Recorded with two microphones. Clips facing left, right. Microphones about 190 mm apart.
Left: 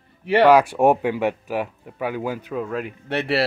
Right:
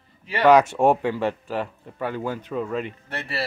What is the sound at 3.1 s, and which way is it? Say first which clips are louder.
Speech: left 12 dB; 70° left (ahead or behind).